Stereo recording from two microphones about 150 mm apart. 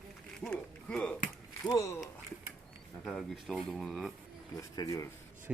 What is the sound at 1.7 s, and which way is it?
Speech, 20° left (ahead or behind).